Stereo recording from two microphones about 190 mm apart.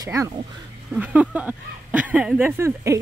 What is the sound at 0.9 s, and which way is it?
Speech, 5° right (ahead or behind).